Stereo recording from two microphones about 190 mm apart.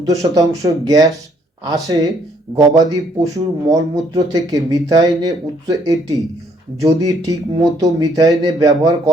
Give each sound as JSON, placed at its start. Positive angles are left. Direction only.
{"t": 0.0, "sound": "speech", "side_deg": -15}